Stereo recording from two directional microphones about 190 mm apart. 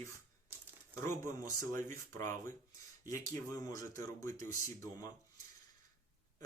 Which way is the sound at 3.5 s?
20° left (ahead or behind).